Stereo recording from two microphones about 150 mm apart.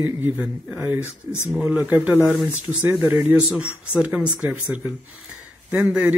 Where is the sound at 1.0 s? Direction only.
15° left (ahead or behind).